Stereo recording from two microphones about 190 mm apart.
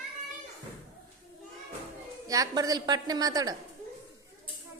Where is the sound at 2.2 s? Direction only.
20° right (ahead or behind).